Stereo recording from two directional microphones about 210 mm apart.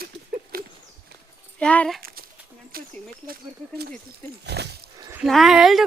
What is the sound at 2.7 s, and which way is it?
Speech, 45° right (ahead or behind).